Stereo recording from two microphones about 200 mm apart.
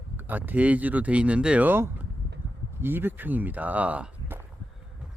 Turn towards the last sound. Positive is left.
turn(degrees=-10)  # may be behind; listen again after turning